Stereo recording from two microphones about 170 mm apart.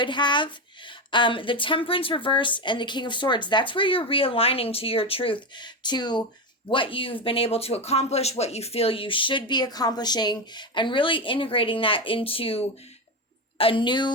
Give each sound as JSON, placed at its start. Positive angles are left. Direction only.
{"t": 0.0, "sound": "a woman's voice", "side_deg": 25}